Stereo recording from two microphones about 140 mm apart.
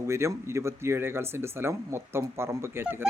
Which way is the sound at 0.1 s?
20° right (ahead or behind).